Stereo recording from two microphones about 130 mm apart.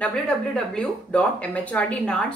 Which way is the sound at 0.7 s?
10° left (ahead or behind).